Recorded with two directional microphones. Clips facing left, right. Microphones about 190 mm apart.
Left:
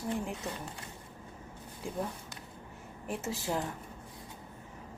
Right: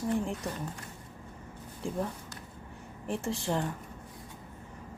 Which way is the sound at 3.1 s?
5° left (ahead or behind).